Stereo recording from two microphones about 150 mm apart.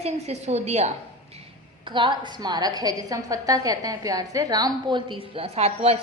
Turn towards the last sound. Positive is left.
turn(degrees=-45)  # may be behind; listen again after turning